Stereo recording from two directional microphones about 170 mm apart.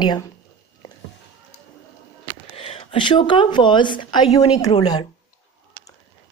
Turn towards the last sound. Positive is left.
turn(degrees=25)  # may be behind; listen again after turning